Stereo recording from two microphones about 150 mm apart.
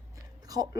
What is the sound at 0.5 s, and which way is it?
Speech, 25° right (ahead or behind).